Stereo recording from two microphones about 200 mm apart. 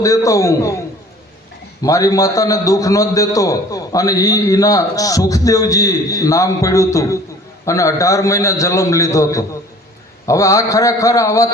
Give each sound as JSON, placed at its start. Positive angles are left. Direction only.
{"t": 0.0, "sound": "a man's voice", "side_deg": 15}
{"t": 1.8, "sound": "a man's voice", "side_deg": 15}